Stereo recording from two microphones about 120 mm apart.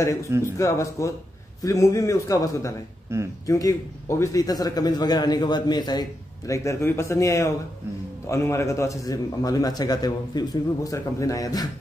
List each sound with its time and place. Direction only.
0.0 s a man's voice: 25° left (ahead or behind)
3.1 s speech: 25° right (ahead or behind)
3.4 s a man's voice: 30° left (ahead or behind)